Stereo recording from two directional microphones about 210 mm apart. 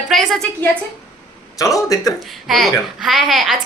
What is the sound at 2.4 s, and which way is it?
A woman's voice, centre (ahead or behind).